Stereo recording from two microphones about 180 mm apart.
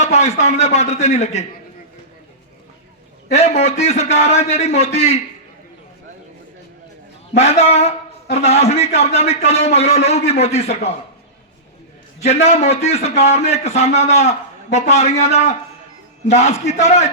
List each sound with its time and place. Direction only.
0.0 s a man's voice: 40° left (ahead or behind)
3.3 s a man's voice: 35° left (ahead or behind)
7.3 s a man's voice: 35° left (ahead or behind)
12.2 s a man's voice: 35° left (ahead or behind)